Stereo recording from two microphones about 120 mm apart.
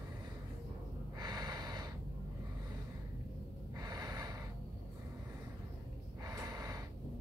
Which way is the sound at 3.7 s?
30° right (ahead or behind).